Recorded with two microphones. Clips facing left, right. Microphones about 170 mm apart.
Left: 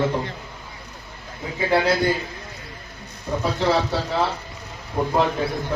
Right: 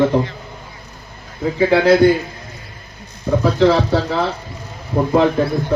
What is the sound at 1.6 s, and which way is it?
Speech, 60° right (ahead or behind).